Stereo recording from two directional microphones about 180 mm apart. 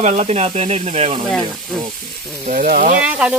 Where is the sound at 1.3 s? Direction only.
Centre (ahead or behind).